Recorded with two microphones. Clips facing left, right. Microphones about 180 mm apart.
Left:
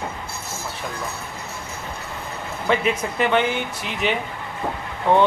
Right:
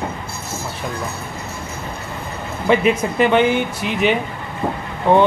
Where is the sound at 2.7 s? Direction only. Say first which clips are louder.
Right 6 dB; 15° right (ahead or behind).